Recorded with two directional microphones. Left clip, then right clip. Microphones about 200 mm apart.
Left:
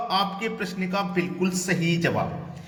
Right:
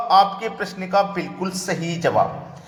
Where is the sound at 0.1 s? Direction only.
10° left (ahead or behind).